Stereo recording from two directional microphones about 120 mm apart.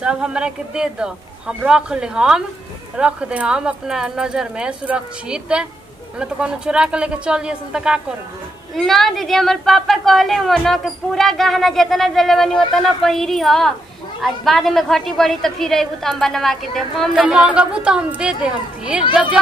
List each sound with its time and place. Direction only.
0.0 s speech: 5° right (ahead or behind)